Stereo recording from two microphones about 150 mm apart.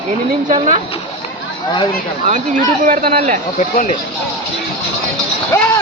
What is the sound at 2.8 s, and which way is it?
Speech, 65° right (ahead or behind).